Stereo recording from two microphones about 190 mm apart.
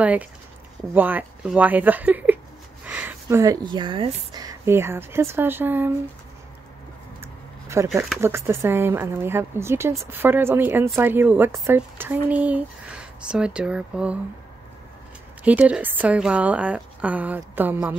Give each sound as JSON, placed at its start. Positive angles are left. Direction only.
{"t": 0.0, "sound": "speech", "side_deg": -5}
{"t": 7.6, "sound": "speech", "side_deg": -15}
{"t": 15.4, "sound": "speech", "side_deg": -5}